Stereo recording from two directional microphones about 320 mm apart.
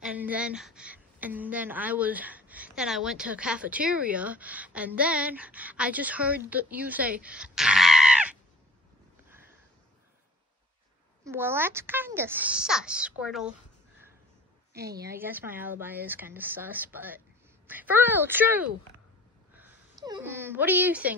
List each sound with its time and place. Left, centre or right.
0.0 s a woman's voice: centre
11.2 s speech: centre
14.7 s a woman's voice: right
15.0 s a woman's voice: centre